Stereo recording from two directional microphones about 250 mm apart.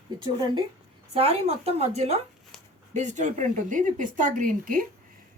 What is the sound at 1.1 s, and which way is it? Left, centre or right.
Speech, right.